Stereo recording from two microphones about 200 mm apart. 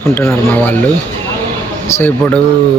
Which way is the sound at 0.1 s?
10° left (ahead or behind).